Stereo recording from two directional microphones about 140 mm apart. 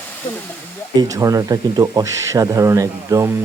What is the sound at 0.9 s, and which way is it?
Speech, 25° right (ahead or behind).